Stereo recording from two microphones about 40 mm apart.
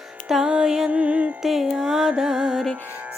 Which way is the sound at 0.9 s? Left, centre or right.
Right.